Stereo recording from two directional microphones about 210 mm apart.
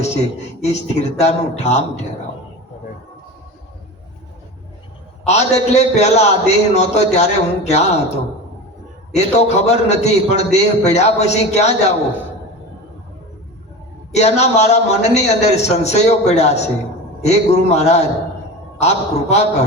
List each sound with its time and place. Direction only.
0.6 s a man's voice: 30° left (ahead or behind)
5.2 s a man's voice: 30° left (ahead or behind)
9.1 s a man's voice: 30° left (ahead or behind)
14.1 s a man's voice: 30° left (ahead or behind)